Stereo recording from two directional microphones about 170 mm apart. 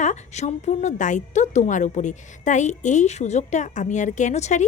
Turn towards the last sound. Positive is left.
turn(degrees=45)  # may be behind; listen again after turning